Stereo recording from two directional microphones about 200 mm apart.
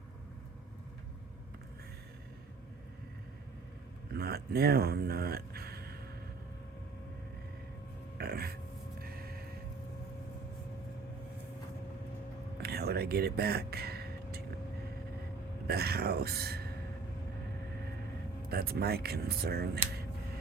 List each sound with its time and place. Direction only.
4.1 s speech: 50° right (ahead or behind)
8.2 s a sound: 50° right (ahead or behind)
9.0 s vehicle: 50° right (ahead or behind)
12.6 s a sound: 50° right (ahead or behind)
15.6 s speech: 50° right (ahead or behind)
18.4 s speech: 50° right (ahead or behind)